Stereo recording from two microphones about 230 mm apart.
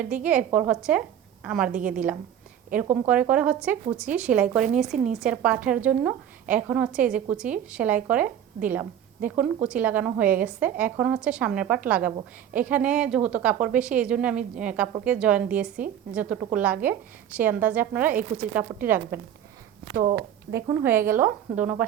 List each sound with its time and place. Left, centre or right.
0.3 s a woman's voice: centre
19.9 s speech: right
20.7 s a woman's voice: centre